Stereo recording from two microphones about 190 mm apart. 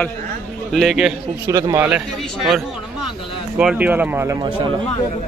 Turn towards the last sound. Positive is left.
turn(degrees=-10)  # may be behind; listen again after turning